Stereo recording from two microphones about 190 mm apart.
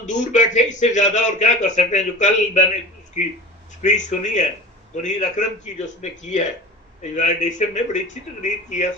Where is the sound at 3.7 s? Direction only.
40° left (ahead or behind).